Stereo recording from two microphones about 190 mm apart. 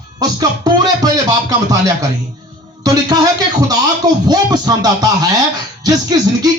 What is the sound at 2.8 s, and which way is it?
Speech, 20° right (ahead or behind).